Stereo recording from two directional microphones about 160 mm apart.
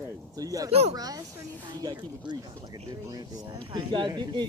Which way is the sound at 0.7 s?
40° right (ahead or behind).